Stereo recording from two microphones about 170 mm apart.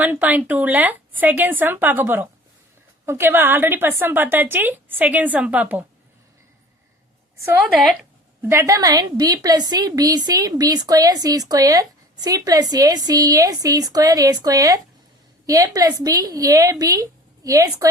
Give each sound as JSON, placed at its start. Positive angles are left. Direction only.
{"t": 0.0, "sound": "a woman's voice", "side_deg": -10}
{"t": 7.6, "sound": "speech", "side_deg": 0}
{"t": 8.4, "sound": "a woman's voice", "side_deg": -15}